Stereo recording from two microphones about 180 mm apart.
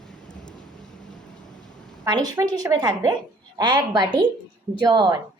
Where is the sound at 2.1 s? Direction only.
20° right (ahead or behind).